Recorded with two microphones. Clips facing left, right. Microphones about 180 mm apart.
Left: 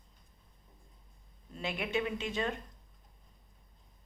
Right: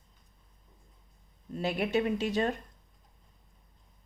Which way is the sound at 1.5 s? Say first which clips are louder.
Right 6 dB; 40° right (ahead or behind).